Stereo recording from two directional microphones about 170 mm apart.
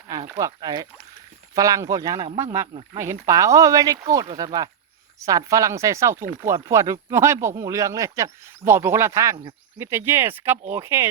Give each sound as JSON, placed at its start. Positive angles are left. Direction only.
{"t": 0.3, "sound": "speech", "side_deg": -20}